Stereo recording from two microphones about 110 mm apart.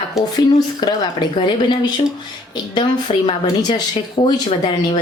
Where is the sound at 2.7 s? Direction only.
45° left (ahead or behind).